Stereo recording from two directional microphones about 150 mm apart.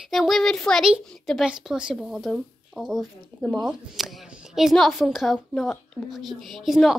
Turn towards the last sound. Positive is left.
turn(degrees=0)  # may be behind; listen again after turning